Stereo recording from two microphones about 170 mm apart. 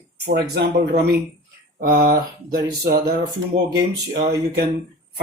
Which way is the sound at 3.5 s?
30° right (ahead or behind).